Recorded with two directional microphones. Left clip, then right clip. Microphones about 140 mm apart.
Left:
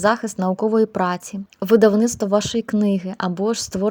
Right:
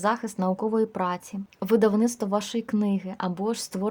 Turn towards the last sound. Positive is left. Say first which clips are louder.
# left 7 dB
turn(degrees=25)  # may be behind; listen again after turning